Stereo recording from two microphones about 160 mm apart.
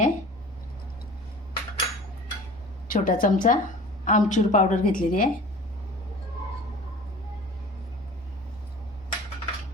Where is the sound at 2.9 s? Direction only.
55° left (ahead or behind).